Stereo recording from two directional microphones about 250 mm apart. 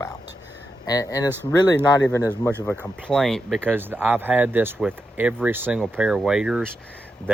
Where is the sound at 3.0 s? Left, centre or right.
Centre.